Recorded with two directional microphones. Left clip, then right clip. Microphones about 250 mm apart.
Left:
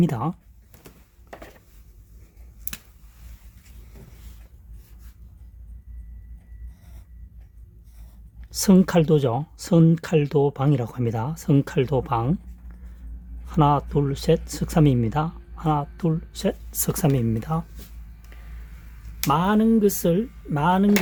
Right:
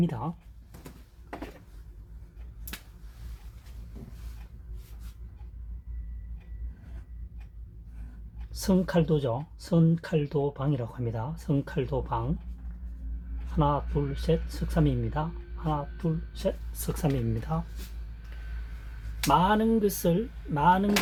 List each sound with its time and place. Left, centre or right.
0.0 s speech: left
8.6 s speech: left
13.6 s speech: left
19.3 s speech: left